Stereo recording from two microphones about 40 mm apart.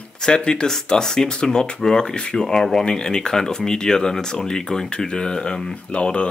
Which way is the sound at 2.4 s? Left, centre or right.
Centre.